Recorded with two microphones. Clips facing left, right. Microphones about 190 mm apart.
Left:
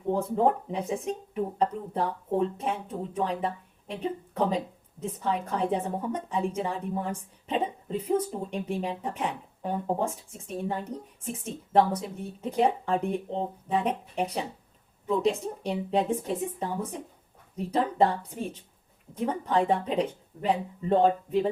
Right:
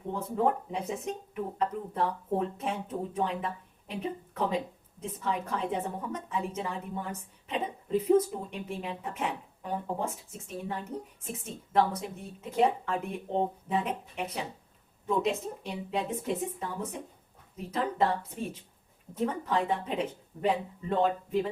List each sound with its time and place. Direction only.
0.1 s a woman's voice: 30° left (ahead or behind)